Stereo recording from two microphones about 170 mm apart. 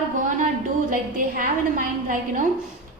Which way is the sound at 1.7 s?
50° right (ahead or behind).